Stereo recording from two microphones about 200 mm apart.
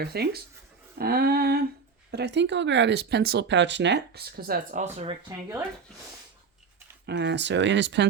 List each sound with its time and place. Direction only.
0.0 s a sound: 55° right (ahead or behind)
2.0 s speech: 60° right (ahead or behind); by 5.1 s 35° right (ahead or behind)
7.1 s speech: 60° right (ahead or behind)